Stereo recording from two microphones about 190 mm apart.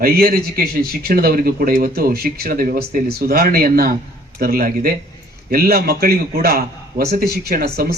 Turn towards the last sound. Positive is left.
turn(degrees=-50)  # may be behind; listen again after turning